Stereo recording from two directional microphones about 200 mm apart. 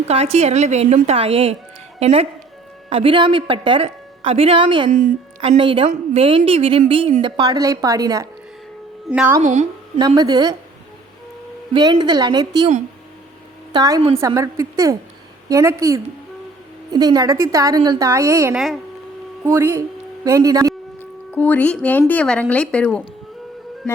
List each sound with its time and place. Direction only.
0.1 s a woman's voice: 30° right (ahead or behind)
9.0 s a woman's voice: 5° right (ahead or behind)
9.4 s a woman's voice: 35° right (ahead or behind)
10.2 s a woman's voice: 20° right (ahead or behind)
11.7 s a woman's voice: 20° right (ahead or behind)
13.7 s speech: 15° right (ahead or behind)
18.5 s a woman's voice: centre (ahead or behind)
19.5 s speech: 10° right (ahead or behind)
21.0 s a woman's voice: 10° left (ahead or behind)